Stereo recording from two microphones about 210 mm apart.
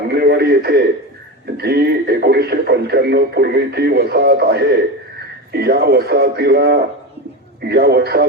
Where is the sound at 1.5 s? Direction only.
50° right (ahead or behind).